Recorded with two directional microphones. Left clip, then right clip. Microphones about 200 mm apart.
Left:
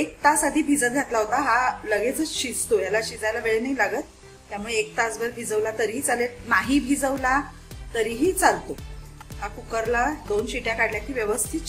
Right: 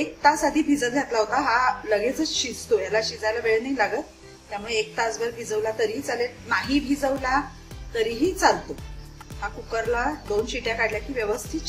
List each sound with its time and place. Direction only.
0.2 s a woman's voice: 15° left (ahead or behind)
9.7 s a woman's voice: 15° left (ahead or behind)